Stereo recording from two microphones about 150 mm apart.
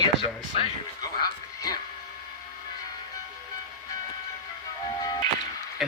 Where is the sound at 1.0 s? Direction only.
25° left (ahead or behind).